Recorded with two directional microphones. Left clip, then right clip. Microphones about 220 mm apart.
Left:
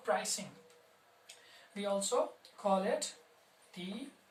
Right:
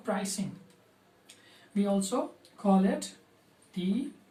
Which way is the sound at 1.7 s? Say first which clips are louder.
Right 4 dB; 15° left (ahead or behind).